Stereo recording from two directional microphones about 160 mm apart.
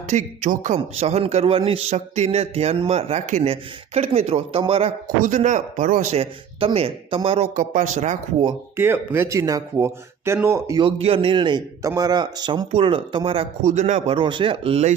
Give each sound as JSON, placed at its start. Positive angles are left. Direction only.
{"t": 0.1, "sound": "a man's voice", "side_deg": -45}
{"t": 5.2, "sound": "a man's voice", "side_deg": -50}
{"t": 8.7, "sound": "speech", "side_deg": -15}
{"t": 10.8, "sound": "a man's voice", "side_deg": -35}
{"t": 13.7, "sound": "a man's voice", "side_deg": -50}
{"t": 14.2, "sound": "a man's voice", "side_deg": -30}